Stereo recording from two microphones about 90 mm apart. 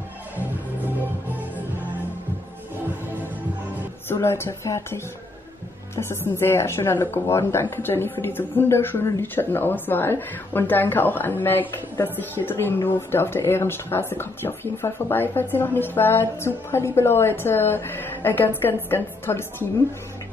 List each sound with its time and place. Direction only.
4.1 s speech: 30° left (ahead or behind)